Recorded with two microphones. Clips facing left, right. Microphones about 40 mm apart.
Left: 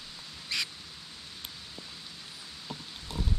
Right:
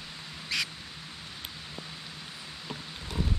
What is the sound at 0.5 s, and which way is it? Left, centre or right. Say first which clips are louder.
Duck: right 2 dB; right.